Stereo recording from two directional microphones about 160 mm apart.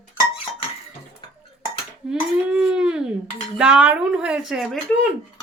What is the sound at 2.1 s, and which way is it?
A child's voice, 5° right (ahead or behind).